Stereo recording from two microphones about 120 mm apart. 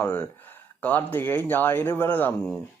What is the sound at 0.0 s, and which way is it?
Speech, 20° left (ahead or behind).